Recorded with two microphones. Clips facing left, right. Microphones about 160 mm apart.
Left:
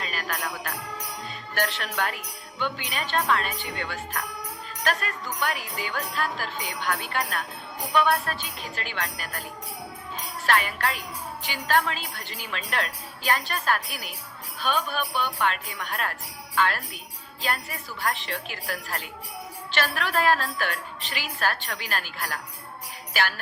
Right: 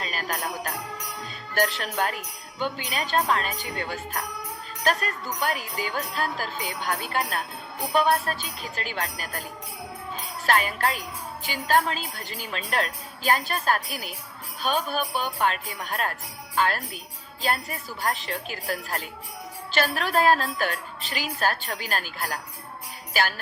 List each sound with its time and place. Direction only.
0.0 s jingle bell: 35° right (ahead or behind)
1.5 s speech: 35° right (ahead or behind)
10.4 s speech: 40° right (ahead or behind)